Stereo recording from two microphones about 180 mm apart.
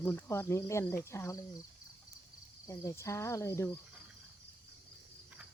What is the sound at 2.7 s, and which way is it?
Speech, 15° left (ahead or behind).